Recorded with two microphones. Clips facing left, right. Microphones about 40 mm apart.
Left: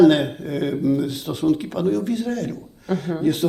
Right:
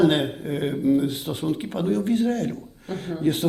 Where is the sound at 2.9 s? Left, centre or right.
Left.